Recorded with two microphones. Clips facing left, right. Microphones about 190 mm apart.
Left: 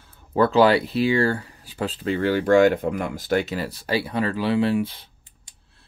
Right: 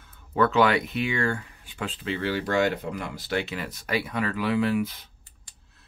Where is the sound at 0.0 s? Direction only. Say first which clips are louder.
Left 3 dB; 30° left (ahead or behind).